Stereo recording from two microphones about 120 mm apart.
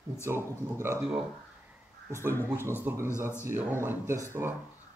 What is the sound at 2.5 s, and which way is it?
A man's voice, 15° right (ahead or behind).